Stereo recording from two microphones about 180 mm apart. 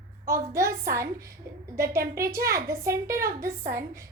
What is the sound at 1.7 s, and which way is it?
A woman's voice, 15° right (ahead or behind).